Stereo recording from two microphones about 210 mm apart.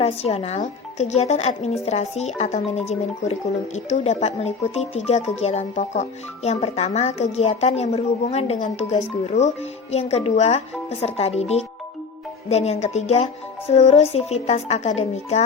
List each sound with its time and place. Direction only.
0.0 s speech: 30° left (ahead or behind)